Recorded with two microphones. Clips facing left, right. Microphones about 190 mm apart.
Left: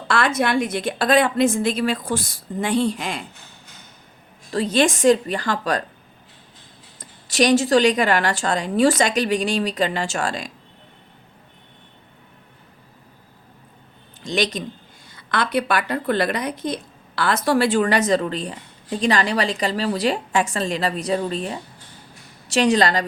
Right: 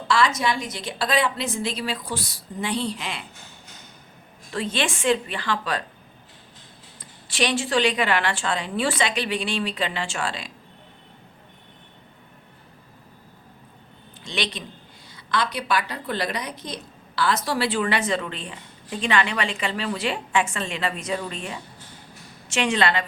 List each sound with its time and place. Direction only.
0.1 s a woman's voice: 55° left (ahead or behind)
4.5 s a woman's voice: 40° left (ahead or behind)
7.0 s a woman's voice: 40° left (ahead or behind)
14.3 s a woman's voice: 45° left (ahead or behind)
15.1 s a woman's voice: 55° left (ahead or behind)